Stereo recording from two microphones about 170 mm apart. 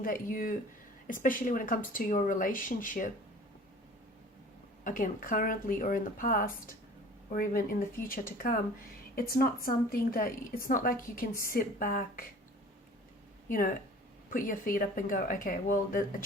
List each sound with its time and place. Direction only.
0.0 s a woman's voice: 55° left (ahead or behind)
4.8 s a woman's voice: 50° left (ahead or behind)
13.5 s a woman's voice: 55° left (ahead or behind)